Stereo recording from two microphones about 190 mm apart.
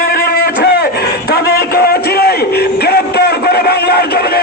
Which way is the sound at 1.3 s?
55° left (ahead or behind).